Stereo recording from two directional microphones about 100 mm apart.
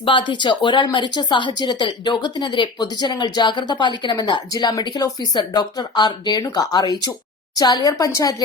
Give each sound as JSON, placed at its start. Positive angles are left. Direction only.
{"t": 0.0, "sound": "a woman's voice", "side_deg": 55}